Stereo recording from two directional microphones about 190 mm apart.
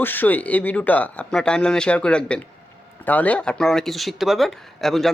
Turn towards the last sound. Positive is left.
turn(degrees=0)  # may be behind; listen again after turning